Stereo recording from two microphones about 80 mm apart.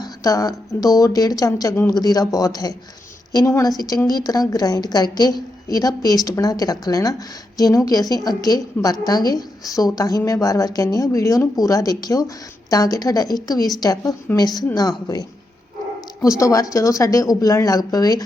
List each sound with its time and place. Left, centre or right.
0.0 s a woman's voice: left
3.8 s a woman's voice: left
16.2 s a woman's voice: left